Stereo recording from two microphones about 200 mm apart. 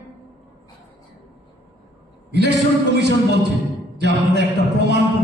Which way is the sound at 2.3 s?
55° right (ahead or behind).